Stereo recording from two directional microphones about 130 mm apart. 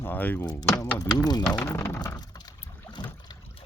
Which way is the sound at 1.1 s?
30° left (ahead or behind).